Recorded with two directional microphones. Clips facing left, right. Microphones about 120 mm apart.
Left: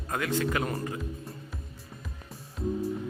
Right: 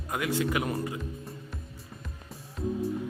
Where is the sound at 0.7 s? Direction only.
Centre (ahead or behind).